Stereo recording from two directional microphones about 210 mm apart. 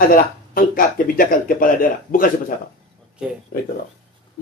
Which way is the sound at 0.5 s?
40° left (ahead or behind).